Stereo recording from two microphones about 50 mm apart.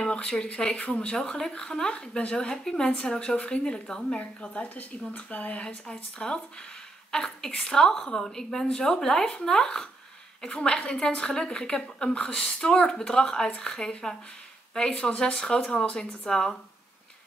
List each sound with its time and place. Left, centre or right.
0.0 s speech: centre
4.2 s a woman's voice: left
6.1 s a woman's voice: centre